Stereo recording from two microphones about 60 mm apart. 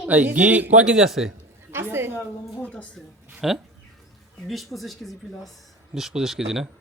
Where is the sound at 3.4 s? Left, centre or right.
Centre.